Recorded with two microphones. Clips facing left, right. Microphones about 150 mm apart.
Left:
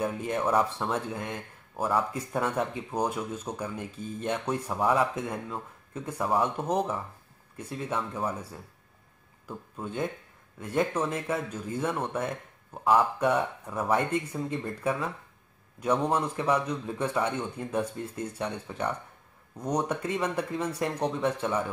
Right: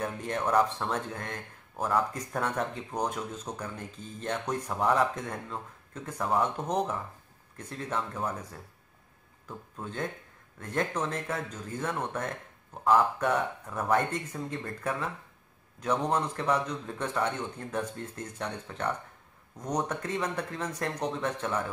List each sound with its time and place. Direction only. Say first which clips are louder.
0.0 s speech: left 3 dB; 5° left (ahead or behind)